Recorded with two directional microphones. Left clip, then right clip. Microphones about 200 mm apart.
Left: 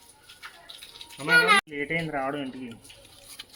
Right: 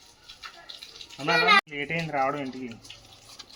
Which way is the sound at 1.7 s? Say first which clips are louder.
Even; 40° right (ahead or behind).